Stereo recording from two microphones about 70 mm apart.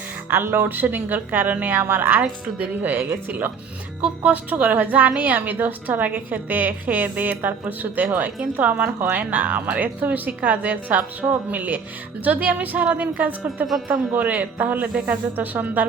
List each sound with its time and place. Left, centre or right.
0.3 s a woman's voice: right
2.9 s a woman's voice: right